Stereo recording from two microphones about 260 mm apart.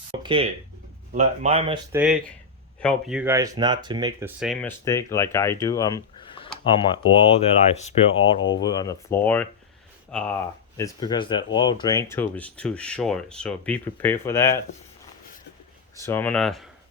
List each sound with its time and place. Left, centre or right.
0.2 s speech: centre
1.9 s speech: centre
4.4 s speech: centre
4.9 s speech: centre
16.0 s speech: centre